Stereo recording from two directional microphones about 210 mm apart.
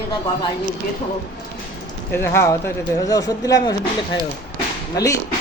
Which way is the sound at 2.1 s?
10° left (ahead or behind).